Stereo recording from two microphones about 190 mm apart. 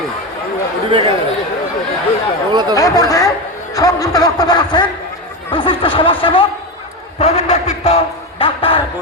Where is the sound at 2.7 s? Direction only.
15° left (ahead or behind).